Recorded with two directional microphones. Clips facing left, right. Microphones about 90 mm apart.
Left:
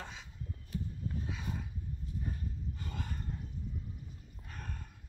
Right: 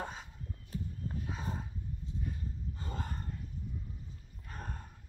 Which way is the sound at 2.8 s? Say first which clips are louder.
Right 3 dB; 35° right (ahead or behind).